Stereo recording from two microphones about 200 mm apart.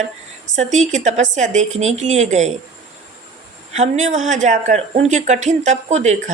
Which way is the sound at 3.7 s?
35° right (ahead or behind).